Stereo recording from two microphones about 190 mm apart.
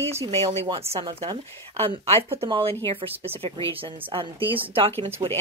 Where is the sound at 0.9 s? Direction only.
30° right (ahead or behind).